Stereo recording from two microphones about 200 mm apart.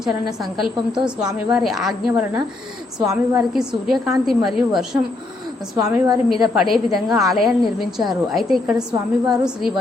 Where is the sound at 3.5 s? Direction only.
Centre (ahead or behind).